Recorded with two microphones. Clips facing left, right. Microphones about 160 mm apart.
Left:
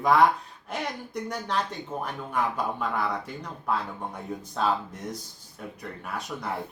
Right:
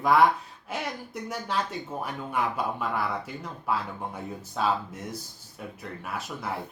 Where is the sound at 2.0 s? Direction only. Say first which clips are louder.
Left 1 dB; 10° right (ahead or behind).